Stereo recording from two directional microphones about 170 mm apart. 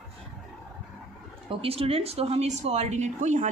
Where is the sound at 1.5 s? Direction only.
35° right (ahead or behind).